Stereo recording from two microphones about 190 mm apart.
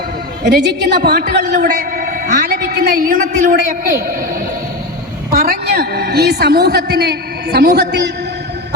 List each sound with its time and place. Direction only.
0.4 s a man's voice: 60° right (ahead or behind); by 4.1 s 45° right (ahead or behind)
5.3 s a woman's voice: 55° right (ahead or behind)